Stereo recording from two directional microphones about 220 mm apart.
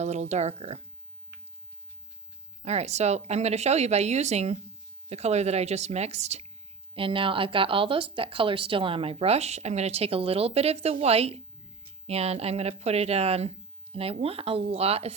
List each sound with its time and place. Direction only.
0.0 s speech: 30° right (ahead or behind)
2.6 s speech: 30° right (ahead or behind)